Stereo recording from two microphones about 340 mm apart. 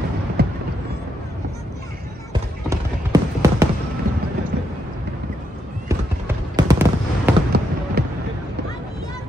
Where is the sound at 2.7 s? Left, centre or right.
Centre.